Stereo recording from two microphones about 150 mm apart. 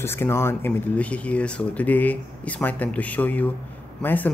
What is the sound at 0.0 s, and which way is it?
Speech, 15° left (ahead or behind).